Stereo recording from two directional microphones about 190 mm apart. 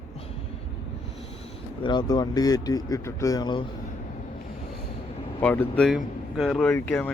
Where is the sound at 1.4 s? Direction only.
25° left (ahead or behind).